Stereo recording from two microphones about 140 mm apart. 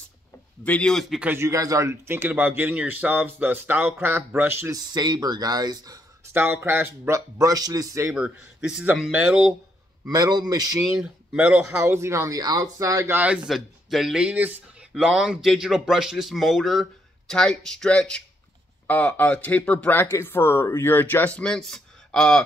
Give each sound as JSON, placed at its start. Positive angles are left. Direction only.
{"t": 0.7, "sound": "speech", "side_deg": 5}
{"t": 1.3, "sound": "speech", "side_deg": -20}
{"t": 4.9, "sound": "speech", "side_deg": -30}
{"t": 6.3, "sound": "speech", "side_deg": -15}
{"t": 8.1, "sound": "speech", "side_deg": -5}
{"t": 10.0, "sound": "speech", "side_deg": -30}
{"t": 10.8, "sound": "speech", "side_deg": -5}
{"t": 11.8, "sound": "speech", "side_deg": -20}
{"t": 13.5, "sound": "speech", "side_deg": 0}